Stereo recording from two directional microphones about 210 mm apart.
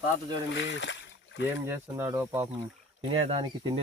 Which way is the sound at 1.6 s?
10° right (ahead or behind).